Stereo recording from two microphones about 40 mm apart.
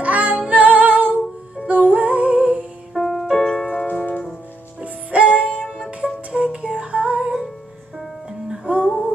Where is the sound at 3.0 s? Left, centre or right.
Centre.